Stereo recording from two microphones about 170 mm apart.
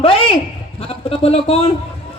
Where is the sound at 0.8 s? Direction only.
35° left (ahead or behind).